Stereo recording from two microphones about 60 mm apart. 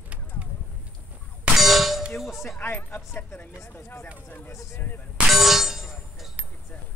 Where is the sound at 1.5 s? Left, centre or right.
Centre.